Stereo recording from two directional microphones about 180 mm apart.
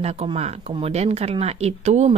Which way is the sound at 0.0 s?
35° right (ahead or behind).